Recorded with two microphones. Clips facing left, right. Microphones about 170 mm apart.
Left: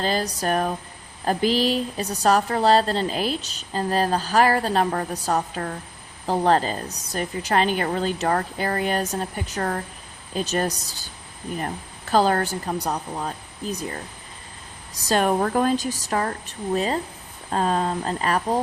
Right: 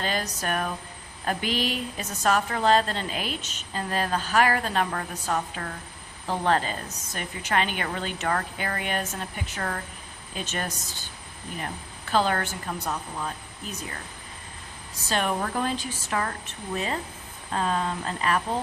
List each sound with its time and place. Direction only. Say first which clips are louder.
0.0 s a woman's voice: left 5 dB; 35° left (ahead or behind)